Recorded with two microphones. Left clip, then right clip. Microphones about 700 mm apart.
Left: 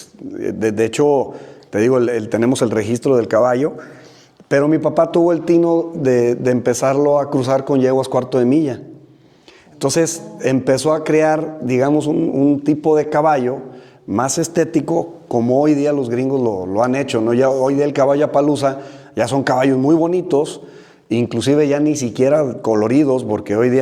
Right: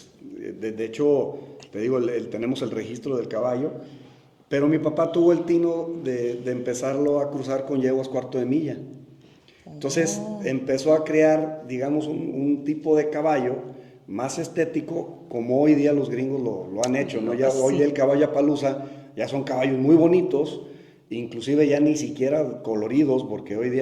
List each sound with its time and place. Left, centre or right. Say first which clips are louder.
0.3 s speech: left 13 dB; left
9.8 s a man's voice: left 7 dB; left